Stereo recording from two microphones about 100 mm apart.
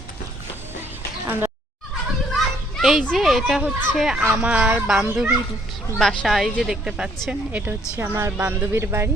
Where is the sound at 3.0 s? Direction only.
Centre (ahead or behind).